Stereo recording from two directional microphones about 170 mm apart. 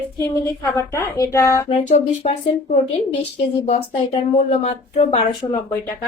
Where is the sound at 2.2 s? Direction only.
40° left (ahead or behind).